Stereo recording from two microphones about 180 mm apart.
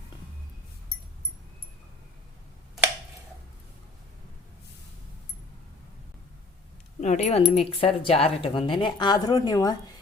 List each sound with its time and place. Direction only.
7.0 s speech: 40° left (ahead or behind); by 9.7 s 20° left (ahead or behind)